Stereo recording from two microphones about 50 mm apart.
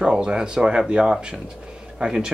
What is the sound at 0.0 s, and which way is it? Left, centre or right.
Speech, centre.